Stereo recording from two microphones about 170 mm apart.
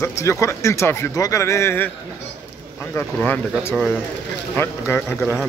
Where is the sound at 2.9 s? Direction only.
10° left (ahead or behind).